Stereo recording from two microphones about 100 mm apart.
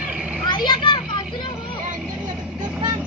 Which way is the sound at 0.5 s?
55° left (ahead or behind).